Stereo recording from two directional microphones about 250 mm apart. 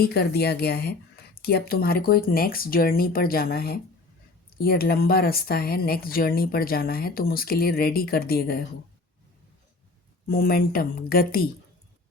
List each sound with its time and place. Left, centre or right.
0.0 s speech: left
10.2 s speech: left